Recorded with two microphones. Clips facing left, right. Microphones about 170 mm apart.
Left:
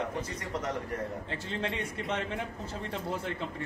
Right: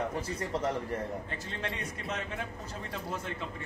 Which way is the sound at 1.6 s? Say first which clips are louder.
Left 4 dB; 30° left (ahead or behind).